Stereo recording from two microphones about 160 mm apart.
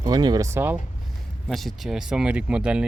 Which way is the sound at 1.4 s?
Centre (ahead or behind).